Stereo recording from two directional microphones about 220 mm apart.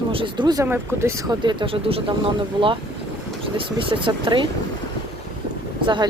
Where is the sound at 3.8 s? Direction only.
25° right (ahead or behind).